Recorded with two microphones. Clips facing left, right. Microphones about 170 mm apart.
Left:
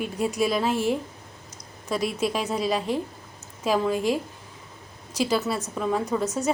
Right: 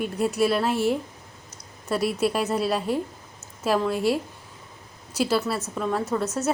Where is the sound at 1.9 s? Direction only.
5° right (ahead or behind).